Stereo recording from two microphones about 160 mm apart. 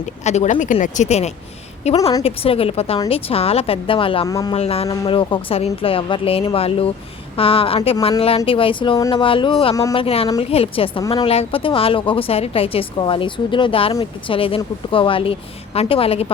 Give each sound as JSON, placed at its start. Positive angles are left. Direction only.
{"t": 0.0, "sound": "speech", "side_deg": 45}
{"t": 4.3, "sound": "speech", "side_deg": 20}
{"t": 4.5, "sound": "speech", "side_deg": 40}